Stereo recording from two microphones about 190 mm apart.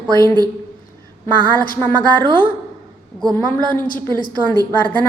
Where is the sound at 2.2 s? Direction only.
25° right (ahead or behind).